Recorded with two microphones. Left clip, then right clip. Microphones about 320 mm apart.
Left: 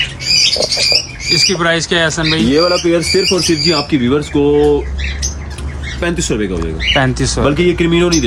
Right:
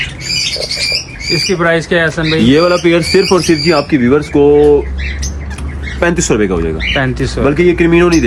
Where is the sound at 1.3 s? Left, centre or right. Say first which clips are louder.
Right 1 dB; centre.